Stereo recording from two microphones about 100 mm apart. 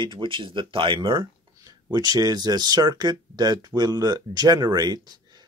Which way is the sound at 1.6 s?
40° right (ahead or behind).